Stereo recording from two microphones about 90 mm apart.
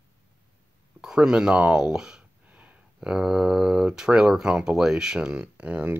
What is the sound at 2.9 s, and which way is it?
Speech, 5° right (ahead or behind).